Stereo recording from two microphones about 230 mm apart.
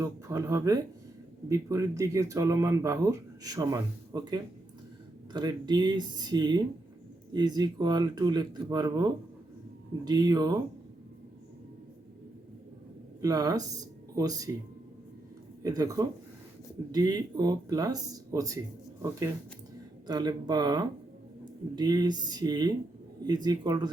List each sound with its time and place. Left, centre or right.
0.0 s speech: centre
13.2 s speech: centre
15.6 s speech: centre
20.1 s speech: centre